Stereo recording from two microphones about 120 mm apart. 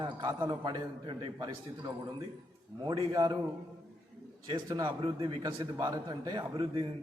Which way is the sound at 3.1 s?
35° right (ahead or behind).